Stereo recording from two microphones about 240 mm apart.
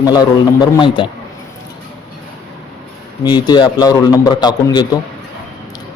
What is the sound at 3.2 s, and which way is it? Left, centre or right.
A man's voice, centre.